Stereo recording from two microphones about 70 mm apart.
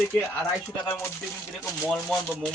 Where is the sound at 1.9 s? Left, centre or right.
Centre.